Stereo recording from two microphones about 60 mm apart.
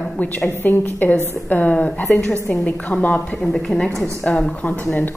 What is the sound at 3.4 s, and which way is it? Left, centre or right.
A woman's voice, centre.